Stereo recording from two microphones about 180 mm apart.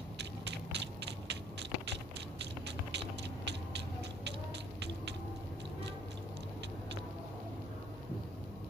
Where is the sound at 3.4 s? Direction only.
70° right (ahead or behind).